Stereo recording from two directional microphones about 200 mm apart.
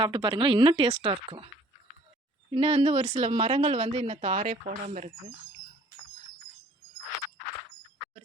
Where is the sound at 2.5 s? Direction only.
30° right (ahead or behind).